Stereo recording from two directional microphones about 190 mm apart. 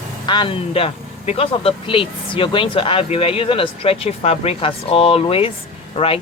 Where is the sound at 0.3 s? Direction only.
25° left (ahead or behind).